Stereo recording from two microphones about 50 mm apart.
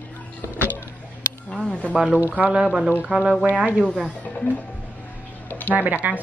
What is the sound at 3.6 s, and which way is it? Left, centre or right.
Speech, right.